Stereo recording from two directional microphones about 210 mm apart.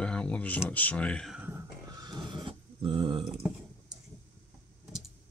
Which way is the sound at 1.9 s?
20° right (ahead or behind).